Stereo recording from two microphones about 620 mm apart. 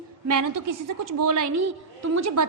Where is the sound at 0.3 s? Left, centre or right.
Right.